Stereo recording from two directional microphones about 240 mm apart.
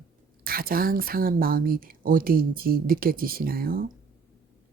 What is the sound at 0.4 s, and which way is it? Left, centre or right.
Speech, right.